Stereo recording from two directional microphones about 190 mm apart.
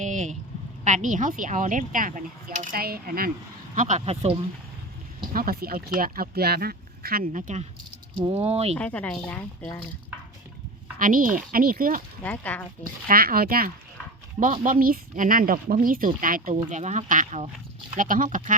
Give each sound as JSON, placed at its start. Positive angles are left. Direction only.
{"t": 0.0, "sound": "a sound", "side_deg": -40}
{"t": 0.9, "sound": "speech", "side_deg": -40}
{"t": 3.8, "sound": "speech", "side_deg": -40}
{"t": 5.3, "sound": "speech", "side_deg": -50}
{"t": 8.8, "sound": "a woman's voice", "side_deg": 5}
{"t": 10.9, "sound": "speech", "side_deg": -45}
{"t": 12.2, "sound": "a woman's voice", "side_deg": 10}
{"t": 13.1, "sound": "speech", "side_deg": -50}